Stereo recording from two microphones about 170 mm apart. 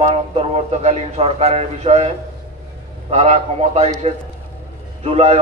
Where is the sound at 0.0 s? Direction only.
35° right (ahead or behind).